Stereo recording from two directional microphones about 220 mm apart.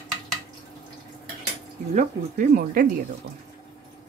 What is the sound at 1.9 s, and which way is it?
Speech, 40° right (ahead or behind).